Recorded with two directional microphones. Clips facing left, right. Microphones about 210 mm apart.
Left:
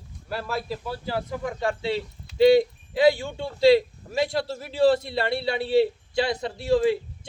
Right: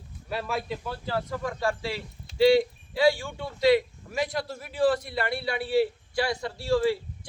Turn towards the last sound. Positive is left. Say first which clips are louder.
# left 3 dB
turn(degrees=20)  # may be behind; listen again after turning